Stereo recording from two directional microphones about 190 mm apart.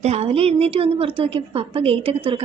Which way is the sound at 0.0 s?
35° right (ahead or behind).